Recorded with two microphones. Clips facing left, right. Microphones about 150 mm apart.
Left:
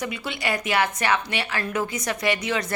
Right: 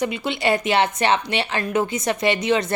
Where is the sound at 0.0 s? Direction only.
25° right (ahead or behind).